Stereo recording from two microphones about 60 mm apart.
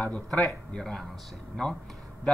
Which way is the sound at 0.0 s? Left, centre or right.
Left.